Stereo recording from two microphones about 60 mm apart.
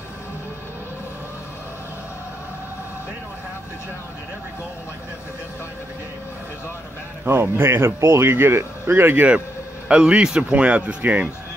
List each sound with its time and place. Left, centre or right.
7.2 s speech: right
9.8 s speech: centre